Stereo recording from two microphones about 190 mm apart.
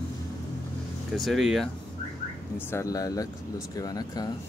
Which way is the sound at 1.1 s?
Centre (ahead or behind).